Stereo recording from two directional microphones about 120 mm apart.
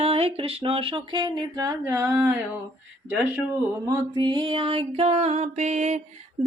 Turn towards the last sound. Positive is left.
turn(degrees=-80)